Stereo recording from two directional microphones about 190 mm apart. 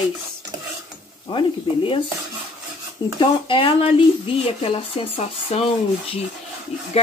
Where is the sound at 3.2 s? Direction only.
25° left (ahead or behind).